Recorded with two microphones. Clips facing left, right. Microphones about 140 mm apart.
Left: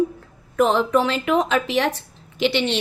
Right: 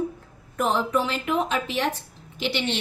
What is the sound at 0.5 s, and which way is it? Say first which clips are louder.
A woman's voice: left 6 dB; 90° left.